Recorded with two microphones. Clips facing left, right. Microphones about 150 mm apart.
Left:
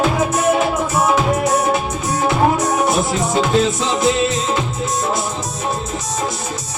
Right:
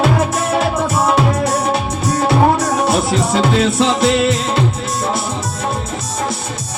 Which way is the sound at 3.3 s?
70° right (ahead or behind).